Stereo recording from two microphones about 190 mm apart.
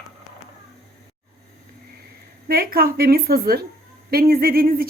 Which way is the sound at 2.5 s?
50° right (ahead or behind).